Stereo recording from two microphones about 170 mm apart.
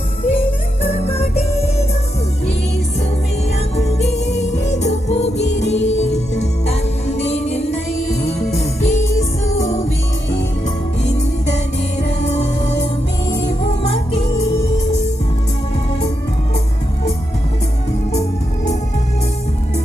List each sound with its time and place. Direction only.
0.3 s music: 40° left (ahead or behind)
3.8 s music: 40° left (ahead or behind)
13.2 s music: 35° left (ahead or behind)
18.1 s music: 40° left (ahead or behind)